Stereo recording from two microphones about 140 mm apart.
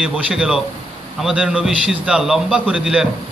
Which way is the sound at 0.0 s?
5° right (ahead or behind).